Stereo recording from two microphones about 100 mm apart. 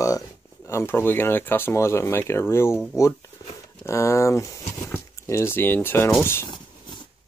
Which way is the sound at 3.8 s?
30° left (ahead or behind).